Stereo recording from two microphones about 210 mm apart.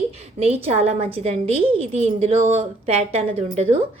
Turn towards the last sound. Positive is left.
turn(degrees=-30)  # may be behind; listen again after turning